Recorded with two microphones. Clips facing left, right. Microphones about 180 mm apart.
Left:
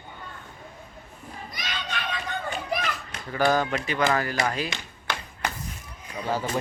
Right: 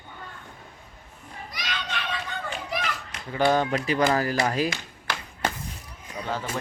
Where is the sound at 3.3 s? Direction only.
25° right (ahead or behind).